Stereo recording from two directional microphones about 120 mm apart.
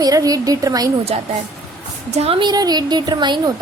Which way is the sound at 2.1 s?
60° right (ahead or behind).